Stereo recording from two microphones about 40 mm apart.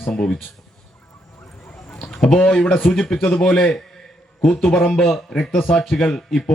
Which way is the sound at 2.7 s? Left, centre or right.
Centre.